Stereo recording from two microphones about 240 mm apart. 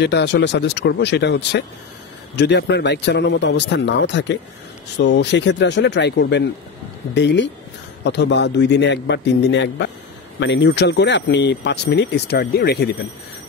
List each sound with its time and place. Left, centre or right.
0.0 s speech: left